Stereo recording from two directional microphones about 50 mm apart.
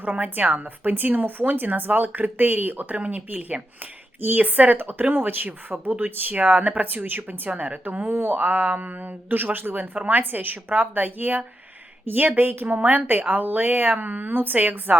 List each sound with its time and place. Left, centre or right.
0.0 s a woman's voice: right
3.0 s a woman's voice: right
8.0 s a woman's voice: right